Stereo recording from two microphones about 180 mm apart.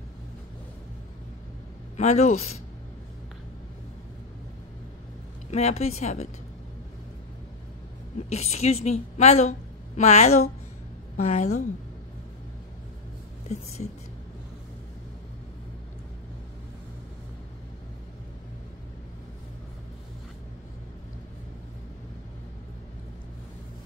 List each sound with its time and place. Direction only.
2.0 s a woman's voice: 40° left (ahead or behind)
5.5 s a woman's voice: 35° left (ahead or behind)
8.2 s a woman's voice: 35° left (ahead or behind)